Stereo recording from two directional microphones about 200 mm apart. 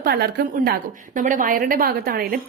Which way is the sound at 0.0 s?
50° right (ahead or behind).